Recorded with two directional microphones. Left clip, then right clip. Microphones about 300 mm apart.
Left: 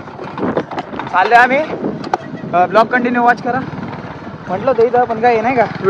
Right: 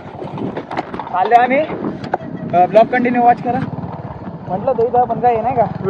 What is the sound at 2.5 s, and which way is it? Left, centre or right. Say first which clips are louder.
Speech: even; centre.